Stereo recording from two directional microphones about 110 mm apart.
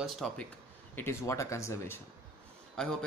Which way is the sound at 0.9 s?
25° left (ahead or behind).